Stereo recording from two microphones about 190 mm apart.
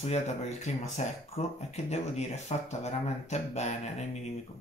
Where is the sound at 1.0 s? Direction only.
35° left (ahead or behind).